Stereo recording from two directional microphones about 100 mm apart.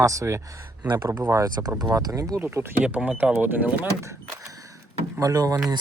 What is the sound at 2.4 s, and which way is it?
Speech, 20° right (ahead or behind).